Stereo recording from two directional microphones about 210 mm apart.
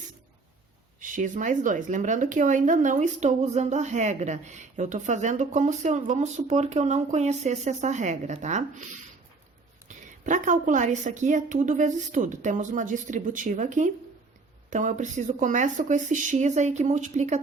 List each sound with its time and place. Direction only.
0.9 s speech: 40° right (ahead or behind)
9.9 s a sound: 35° right (ahead or behind)
10.2 s speech: 35° right (ahead or behind)